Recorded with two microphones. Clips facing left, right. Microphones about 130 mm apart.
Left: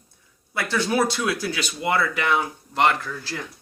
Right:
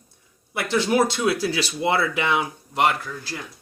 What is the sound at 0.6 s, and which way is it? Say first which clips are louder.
Speech: right 2 dB; 20° right (ahead or behind).